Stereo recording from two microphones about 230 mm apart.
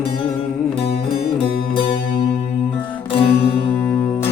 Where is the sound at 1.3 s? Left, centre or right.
Left.